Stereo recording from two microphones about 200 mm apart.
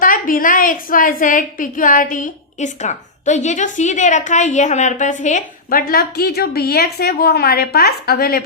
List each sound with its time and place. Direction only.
0.0 s a woman's voice: 45° left (ahead or behind)